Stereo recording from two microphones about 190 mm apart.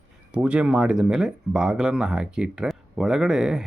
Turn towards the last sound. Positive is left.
turn(degrees=-5)  # may be behind; listen again after turning